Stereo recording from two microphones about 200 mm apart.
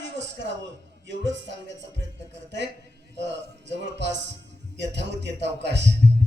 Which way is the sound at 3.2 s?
60° right (ahead or behind).